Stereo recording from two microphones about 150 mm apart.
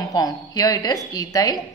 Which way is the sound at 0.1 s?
25° left (ahead or behind).